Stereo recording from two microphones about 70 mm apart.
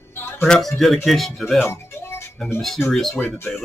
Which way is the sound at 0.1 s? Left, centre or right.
Left.